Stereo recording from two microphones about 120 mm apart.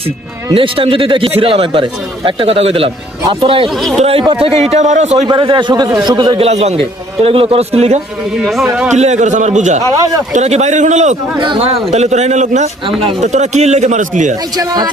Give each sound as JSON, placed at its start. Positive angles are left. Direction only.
{"t": 0.5, "sound": "a man's voice", "side_deg": -50}
{"t": 4.7, "sound": "a man's voice", "side_deg": -75}
{"t": 5.3, "sound": "a man's voice", "side_deg": -40}
{"t": 6.4, "sound": "a man's voice", "side_deg": -65}
{"t": 8.9, "sound": "a man's voice", "side_deg": -75}
{"t": 10.3, "sound": "a man's voice", "side_deg": -70}
{"t": 11.6, "sound": "a man's voice", "side_deg": -60}
{"t": 12.8, "sound": "a man's voice", "side_deg": -45}
{"t": 13.2, "sound": "a man's voice", "side_deg": -75}
{"t": 14.5, "sound": "a man's voice", "side_deg": -35}